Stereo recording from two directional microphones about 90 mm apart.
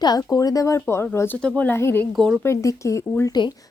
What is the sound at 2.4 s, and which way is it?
Speech, 35° left (ahead or behind).